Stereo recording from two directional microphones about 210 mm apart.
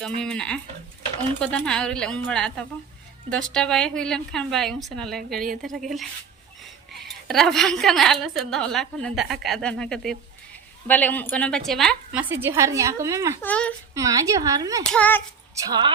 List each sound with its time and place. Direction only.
0.0 s a woman's voice: 5° left (ahead or behind)
6.6 s a woman's voice: centre (ahead or behind)
12.3 s a woman's voice: 10° right (ahead or behind)
13.4 s speech: 5° left (ahead or behind)
13.9 s a woman's voice: 15° right (ahead or behind)
14.9 s speech: 10° left (ahead or behind)
15.5 s a woman's voice: 20° right (ahead or behind)